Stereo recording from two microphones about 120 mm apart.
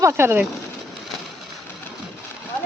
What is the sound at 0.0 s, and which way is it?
Speech, 20° right (ahead or behind).